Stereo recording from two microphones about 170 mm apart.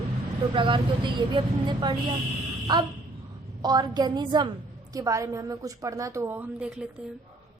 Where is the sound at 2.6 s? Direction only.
25° right (ahead or behind).